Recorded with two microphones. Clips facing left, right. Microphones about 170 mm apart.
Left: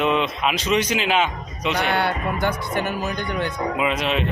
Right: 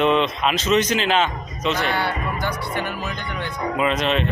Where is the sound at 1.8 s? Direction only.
60° left (ahead or behind); by 3.5 s 45° left (ahead or behind).